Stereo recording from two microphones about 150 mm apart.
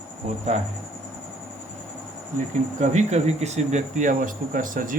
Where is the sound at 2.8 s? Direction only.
50° right (ahead or behind).